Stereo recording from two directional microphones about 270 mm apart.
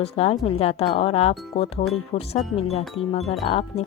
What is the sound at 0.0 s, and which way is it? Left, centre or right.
Speech, left.